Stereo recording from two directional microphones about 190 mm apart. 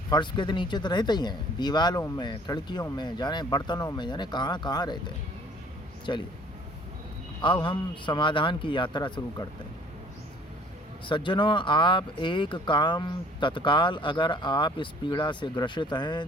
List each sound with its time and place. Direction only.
0.1 s speech: 25° left (ahead or behind)
7.4 s speech: 25° left (ahead or behind)
11.0 s speech: 25° left (ahead or behind)